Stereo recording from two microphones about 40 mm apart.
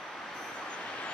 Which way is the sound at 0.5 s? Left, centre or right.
Left.